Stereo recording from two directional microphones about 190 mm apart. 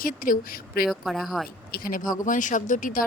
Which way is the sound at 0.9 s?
Centre (ahead or behind).